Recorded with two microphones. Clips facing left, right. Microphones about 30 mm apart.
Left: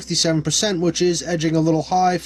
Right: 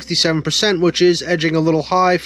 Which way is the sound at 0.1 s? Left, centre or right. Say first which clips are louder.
Right 3 dB; right.